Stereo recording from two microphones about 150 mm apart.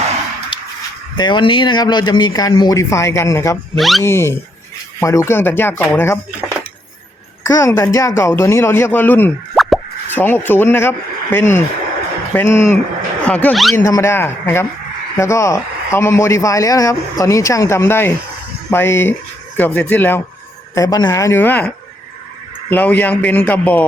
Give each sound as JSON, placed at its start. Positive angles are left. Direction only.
{"t": 1.1, "sound": "a man's voice", "side_deg": 30}
{"t": 3.8, "sound": "speech", "side_deg": 0}
{"t": 4.0, "sound": "speech", "side_deg": 15}
{"t": 7.4, "sound": "speech", "side_deg": 20}
{"t": 9.6, "sound": "plop", "side_deg": 0}
{"t": 10.1, "sound": "speech", "side_deg": 15}
{"t": 13.7, "sound": "a man's voice", "side_deg": 20}
{"t": 20.7, "sound": "a man's voice", "side_deg": 25}
{"t": 22.7, "sound": "speech", "side_deg": 10}